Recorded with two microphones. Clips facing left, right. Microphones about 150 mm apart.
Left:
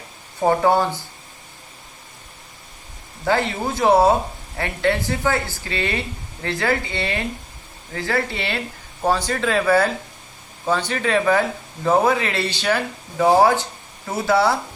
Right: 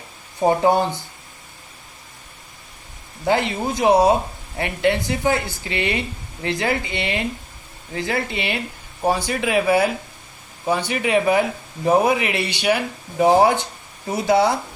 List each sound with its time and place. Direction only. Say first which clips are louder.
0.4 s speech: even; 20° right (ahead or behind)
3.2 s speech: right 1 dB; 20° right (ahead or behind)